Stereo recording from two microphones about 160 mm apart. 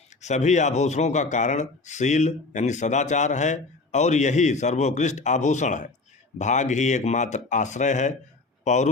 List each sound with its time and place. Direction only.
0.2 s speech: 45° left (ahead or behind)